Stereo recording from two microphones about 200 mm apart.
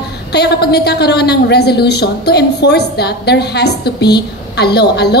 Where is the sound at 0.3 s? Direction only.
55° left (ahead or behind).